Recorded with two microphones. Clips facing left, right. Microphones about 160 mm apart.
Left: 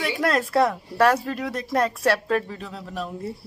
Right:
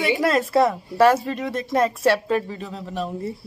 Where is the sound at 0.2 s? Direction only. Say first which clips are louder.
Even; centre (ahead or behind).